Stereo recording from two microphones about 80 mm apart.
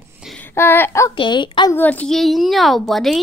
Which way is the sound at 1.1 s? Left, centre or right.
Left.